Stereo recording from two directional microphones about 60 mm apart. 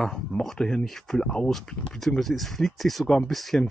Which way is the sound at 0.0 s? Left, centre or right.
Centre.